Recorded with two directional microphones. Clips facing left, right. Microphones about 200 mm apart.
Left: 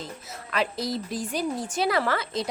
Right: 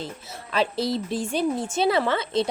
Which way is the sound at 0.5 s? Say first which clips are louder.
Right 4 dB; 30° right (ahead or behind).